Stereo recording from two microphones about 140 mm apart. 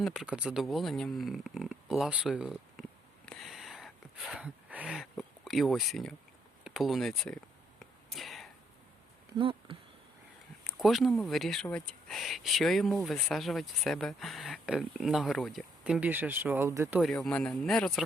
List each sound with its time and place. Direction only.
0.0 s speech: 5° right (ahead or behind)
3.2 s a sound: centre (ahead or behind)
6.7 s speech: centre (ahead or behind)
7.8 s whispering: centre (ahead or behind)
9.4 s speech: 40° right (ahead or behind)
10.6 s speech: centre (ahead or behind); by 17.0 s 20° right (ahead or behind)
17.0 s speech: 5° left (ahead or behind)